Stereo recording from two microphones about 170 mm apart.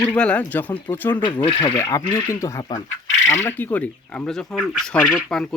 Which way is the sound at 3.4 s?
10° left (ahead or behind).